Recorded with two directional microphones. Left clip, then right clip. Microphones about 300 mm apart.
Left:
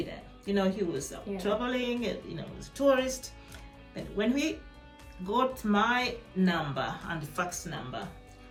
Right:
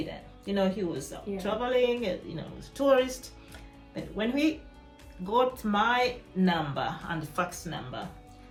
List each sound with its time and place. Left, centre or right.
0.1 s speech: centre